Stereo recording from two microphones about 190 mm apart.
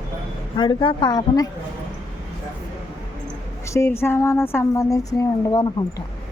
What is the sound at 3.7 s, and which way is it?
A woman's voice, 15° left (ahead or behind).